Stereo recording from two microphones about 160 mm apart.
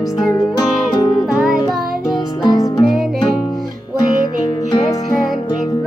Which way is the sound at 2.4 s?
25° left (ahead or behind).